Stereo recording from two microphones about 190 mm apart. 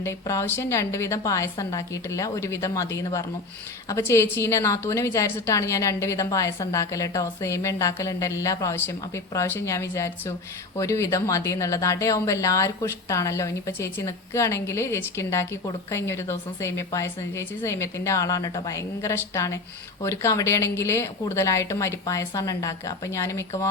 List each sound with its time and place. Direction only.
0.0 s a woman's voice: 15° left (ahead or behind)